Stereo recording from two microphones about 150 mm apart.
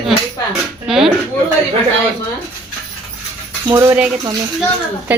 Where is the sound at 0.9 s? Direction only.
Centre (ahead or behind).